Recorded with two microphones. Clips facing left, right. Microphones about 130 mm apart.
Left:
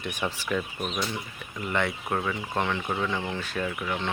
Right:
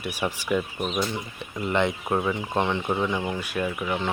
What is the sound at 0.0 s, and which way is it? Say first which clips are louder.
Speech: right 2 dB; 10° right (ahead or behind).